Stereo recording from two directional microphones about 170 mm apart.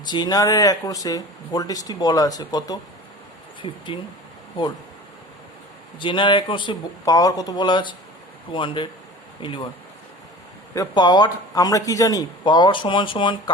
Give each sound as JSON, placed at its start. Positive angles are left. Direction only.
{"t": 0.1, "sound": "speech", "side_deg": 25}
{"t": 6.0, "sound": "speech", "side_deg": 30}
{"t": 10.8, "sound": "speech", "side_deg": 25}